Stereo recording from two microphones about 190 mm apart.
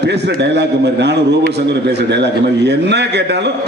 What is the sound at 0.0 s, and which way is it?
A man's voice, 60° right (ahead or behind).